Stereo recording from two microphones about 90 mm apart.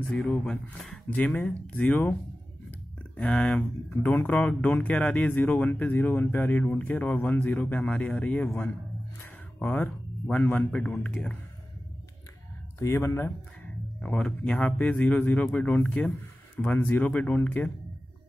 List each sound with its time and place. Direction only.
0.5 s speech: 5° left (ahead or behind)
9.2 s music: 20° left (ahead or behind)
10.3 s speech: 20° left (ahead or behind)
12.7 s speech: 30° left (ahead or behind)
14.0 s speech: 10° left (ahead or behind)